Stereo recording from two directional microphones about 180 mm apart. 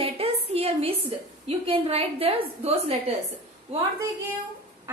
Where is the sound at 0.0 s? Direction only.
30° right (ahead or behind).